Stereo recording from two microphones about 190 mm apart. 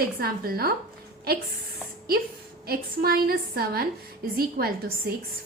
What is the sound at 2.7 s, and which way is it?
A woman's voice, 55° right (ahead or behind).